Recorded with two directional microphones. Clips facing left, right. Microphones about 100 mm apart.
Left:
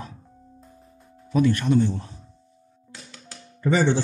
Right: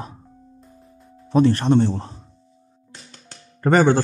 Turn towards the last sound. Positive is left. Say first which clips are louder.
# right 5 dB
turn(degrees=-50)  # may be behind; listen again after turning